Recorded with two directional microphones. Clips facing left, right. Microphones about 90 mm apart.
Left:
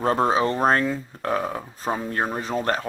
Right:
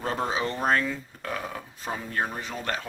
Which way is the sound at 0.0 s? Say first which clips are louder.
Left 8 dB; 40° left (ahead or behind).